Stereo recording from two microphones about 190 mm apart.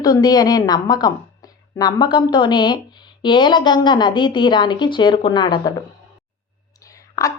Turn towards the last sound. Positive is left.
turn(degrees=15)  # may be behind; listen again after turning